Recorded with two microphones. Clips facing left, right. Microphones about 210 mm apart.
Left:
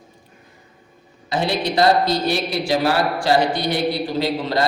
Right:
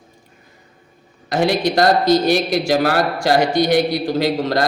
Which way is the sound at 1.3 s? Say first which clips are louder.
Right 4 dB; 45° right (ahead or behind).